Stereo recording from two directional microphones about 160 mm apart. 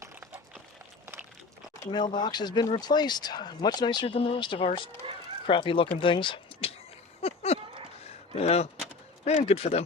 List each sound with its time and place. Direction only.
1.8 s speech: 25° left (ahead or behind)
7.2 s a sound: 40° left (ahead or behind)
9.2 s speech: 40° left (ahead or behind)